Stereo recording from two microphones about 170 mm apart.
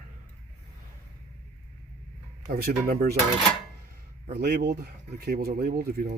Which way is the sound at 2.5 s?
60° right (ahead or behind).